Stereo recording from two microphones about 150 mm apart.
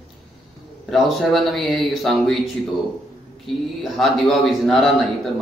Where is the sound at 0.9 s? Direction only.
Centre (ahead or behind).